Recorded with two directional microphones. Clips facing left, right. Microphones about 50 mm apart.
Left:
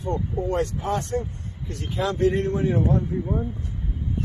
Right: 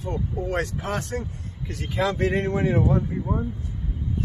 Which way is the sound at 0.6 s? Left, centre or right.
Right.